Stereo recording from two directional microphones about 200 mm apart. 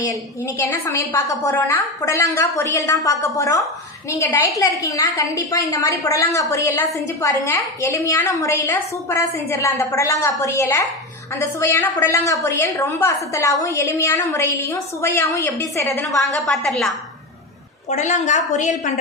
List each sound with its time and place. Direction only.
0.7 s a woman's voice: 10° left (ahead or behind)
16.2 s a woman's voice: centre (ahead or behind)
17.8 s a woman's voice: 35° left (ahead or behind)